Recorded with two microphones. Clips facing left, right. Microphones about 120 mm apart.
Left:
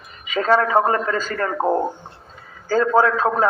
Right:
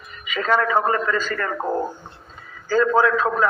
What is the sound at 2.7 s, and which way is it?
Speech, 40° left (ahead or behind).